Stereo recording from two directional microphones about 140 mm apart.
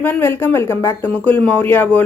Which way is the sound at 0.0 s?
15° left (ahead or behind).